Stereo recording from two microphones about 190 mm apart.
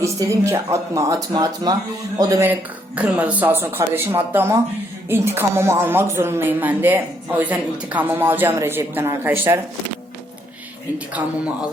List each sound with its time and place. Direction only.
0.0 s speech: 15° right (ahead or behind)
10.9 s speech: 5° right (ahead or behind)